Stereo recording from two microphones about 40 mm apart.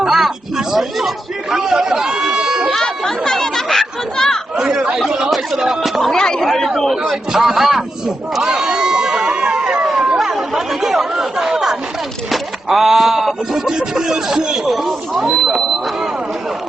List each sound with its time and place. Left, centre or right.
0.0 s speech: centre
2.2 s run: centre
2.8 s chatter: centre
4.5 s speech: centre
6.1 s speech: centre
6.4 s speech: centre
6.9 s speech: centre
8.4 s a sound: centre
10.2 s chatter: centre
11.2 s speech: centre